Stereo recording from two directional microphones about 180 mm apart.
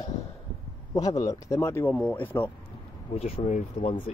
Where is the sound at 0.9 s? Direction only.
20° left (ahead or behind).